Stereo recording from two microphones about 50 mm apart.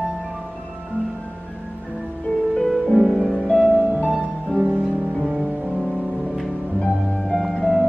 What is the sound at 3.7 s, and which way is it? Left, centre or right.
Music, right.